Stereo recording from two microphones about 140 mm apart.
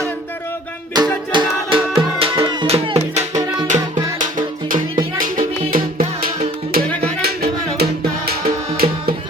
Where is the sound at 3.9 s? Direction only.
70° right (ahead or behind); by 6.3 s 90° right.